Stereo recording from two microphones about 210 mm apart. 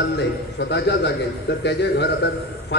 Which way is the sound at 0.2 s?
55° left (ahead or behind).